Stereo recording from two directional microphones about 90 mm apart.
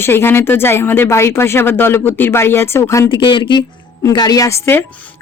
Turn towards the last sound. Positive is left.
turn(degrees=25)  # may be behind; listen again after turning